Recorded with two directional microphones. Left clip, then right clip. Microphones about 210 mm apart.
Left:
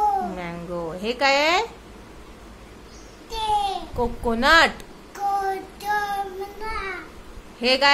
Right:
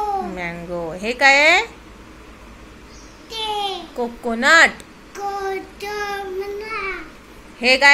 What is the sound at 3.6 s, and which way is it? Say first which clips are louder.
A child's voice: even; 15° left (ahead or behind).